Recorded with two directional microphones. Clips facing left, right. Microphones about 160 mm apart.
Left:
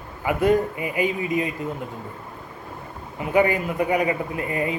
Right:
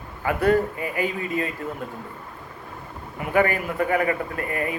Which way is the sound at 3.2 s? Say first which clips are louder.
Left 2 dB; 20° left (ahead or behind).